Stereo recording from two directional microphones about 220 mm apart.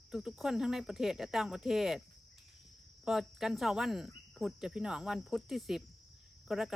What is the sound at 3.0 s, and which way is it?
Speech, centre (ahead or behind).